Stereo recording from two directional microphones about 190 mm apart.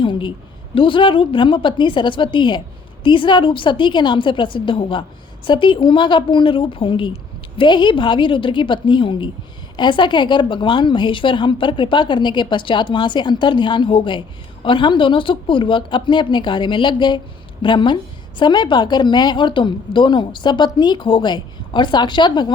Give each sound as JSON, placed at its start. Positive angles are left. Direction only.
{"t": 0.0, "sound": "a woman's voice", "side_deg": 25}